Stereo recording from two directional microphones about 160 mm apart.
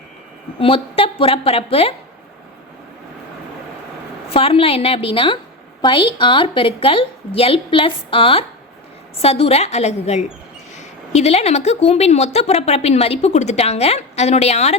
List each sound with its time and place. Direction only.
0.6 s a woman's voice: 35° left (ahead or behind)
4.4 s a woman's voice: 35° left (ahead or behind)